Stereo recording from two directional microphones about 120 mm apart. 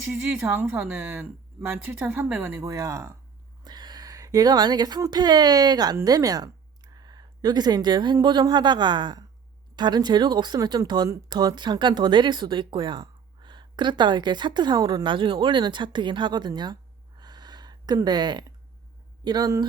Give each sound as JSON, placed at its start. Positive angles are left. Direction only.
{"t": 0.1, "sound": "speech", "side_deg": -20}
{"t": 17.2, "sound": "a sound", "side_deg": -35}
{"t": 19.2, "sound": "speech", "side_deg": -35}